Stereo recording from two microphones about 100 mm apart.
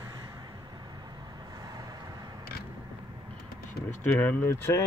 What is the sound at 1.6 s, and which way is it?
Vehicle, 40° right (ahead or behind).